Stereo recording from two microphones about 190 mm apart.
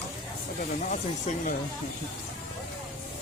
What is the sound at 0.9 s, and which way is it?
Speech, 40° left (ahead or behind).